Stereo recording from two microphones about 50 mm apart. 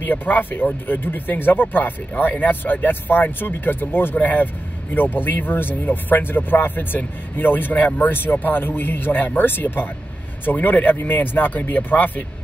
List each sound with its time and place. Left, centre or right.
0.0 s speech: left